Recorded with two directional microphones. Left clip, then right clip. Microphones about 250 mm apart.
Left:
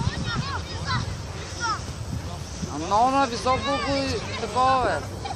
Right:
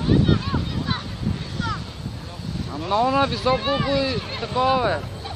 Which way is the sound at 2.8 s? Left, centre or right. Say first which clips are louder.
Right 1 dB; right.